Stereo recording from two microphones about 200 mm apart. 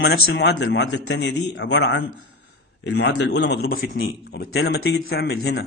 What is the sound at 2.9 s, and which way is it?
A man's voice, 75° left (ahead or behind).